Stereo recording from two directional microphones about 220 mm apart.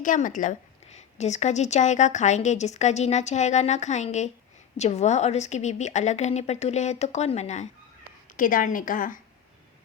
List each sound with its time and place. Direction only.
0.0 s a woman's voice: 35° left (ahead or behind)